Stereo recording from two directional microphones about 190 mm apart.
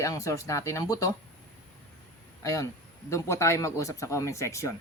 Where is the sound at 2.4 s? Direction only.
15° left (ahead or behind).